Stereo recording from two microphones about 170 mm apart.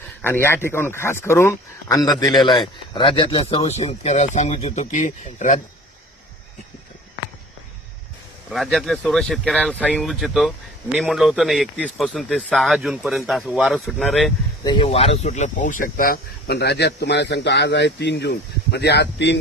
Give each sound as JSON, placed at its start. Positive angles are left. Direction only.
{"t": 0.2, "sound": "speech", "side_deg": 15}
{"t": 8.4, "sound": "speech", "side_deg": 0}
{"t": 14.6, "sound": "speech", "side_deg": 30}